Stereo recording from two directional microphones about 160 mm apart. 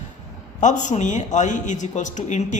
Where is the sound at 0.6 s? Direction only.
50° left (ahead or behind).